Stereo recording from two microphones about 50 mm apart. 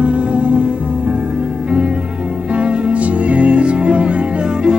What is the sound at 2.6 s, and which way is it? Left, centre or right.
Music, right.